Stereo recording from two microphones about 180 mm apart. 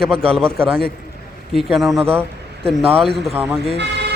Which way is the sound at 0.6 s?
30° right (ahead or behind).